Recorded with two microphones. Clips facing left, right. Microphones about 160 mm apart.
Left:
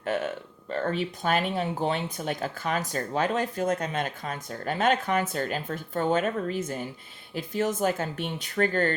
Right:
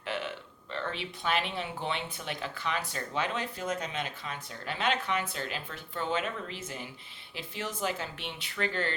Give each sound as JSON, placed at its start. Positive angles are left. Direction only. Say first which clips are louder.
{"t": 0.0, "sound": "speech", "louder": "left 7 dB", "side_deg": 45}